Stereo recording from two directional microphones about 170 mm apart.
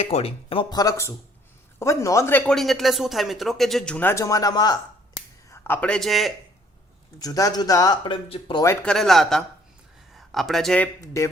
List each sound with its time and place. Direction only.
0.0 s speech: 35° left (ahead or behind)
5.5 s speech: 15° left (ahead or behind)
7.2 s speech: 20° left (ahead or behind)
8.6 s speech: 10° left (ahead or behind)
11.2 s speech: 15° left (ahead or behind)